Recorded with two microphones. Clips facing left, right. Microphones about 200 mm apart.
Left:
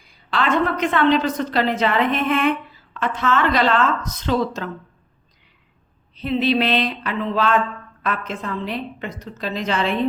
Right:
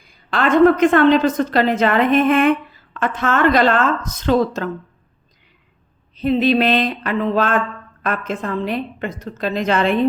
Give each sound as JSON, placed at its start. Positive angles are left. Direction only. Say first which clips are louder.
{"t": 0.3, "sound": "a woman's voice", "louder": "right 8 dB", "side_deg": -50}
{"t": 6.1, "sound": "a woman's voice", "louder": "right 4 dB", "side_deg": -45}